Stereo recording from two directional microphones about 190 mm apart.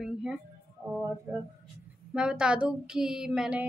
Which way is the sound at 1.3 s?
15° right (ahead or behind).